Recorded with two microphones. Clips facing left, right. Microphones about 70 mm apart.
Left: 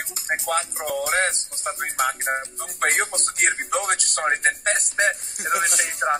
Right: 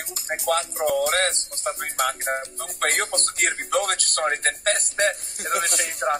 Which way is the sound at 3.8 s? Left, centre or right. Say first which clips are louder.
Right 1 dB; centre.